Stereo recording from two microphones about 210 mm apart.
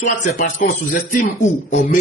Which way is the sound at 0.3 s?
40° left (ahead or behind).